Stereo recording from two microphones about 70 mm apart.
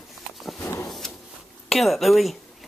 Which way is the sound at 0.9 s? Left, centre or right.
Centre.